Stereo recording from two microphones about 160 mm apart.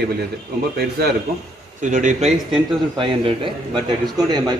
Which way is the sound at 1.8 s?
50° right (ahead or behind).